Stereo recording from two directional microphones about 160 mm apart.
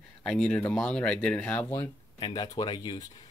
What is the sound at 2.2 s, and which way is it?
Speech, 30° left (ahead or behind).